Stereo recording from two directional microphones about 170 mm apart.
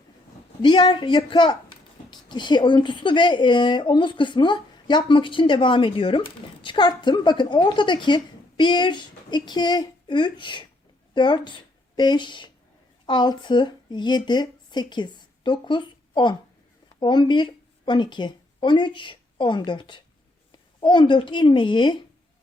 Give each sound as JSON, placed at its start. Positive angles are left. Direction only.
{"t": 0.6, "sound": "speech", "side_deg": 25}